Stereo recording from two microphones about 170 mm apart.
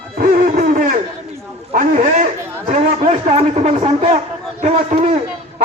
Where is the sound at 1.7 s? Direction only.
45° right (ahead or behind).